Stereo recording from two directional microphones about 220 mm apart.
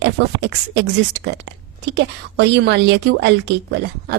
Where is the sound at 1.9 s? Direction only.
55° right (ahead or behind).